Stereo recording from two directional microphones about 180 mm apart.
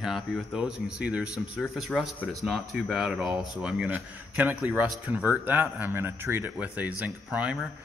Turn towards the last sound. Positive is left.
turn(degrees=-5)  # may be behind; listen again after turning